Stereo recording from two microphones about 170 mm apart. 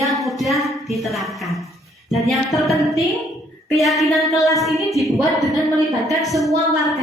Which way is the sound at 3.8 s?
Centre (ahead or behind).